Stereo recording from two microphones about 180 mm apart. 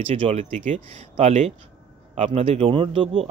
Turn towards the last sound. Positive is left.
turn(degrees=-30)  # may be behind; listen again after turning